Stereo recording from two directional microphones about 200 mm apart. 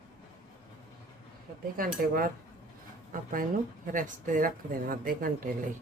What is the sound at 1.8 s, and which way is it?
Speech, 45° right (ahead or behind).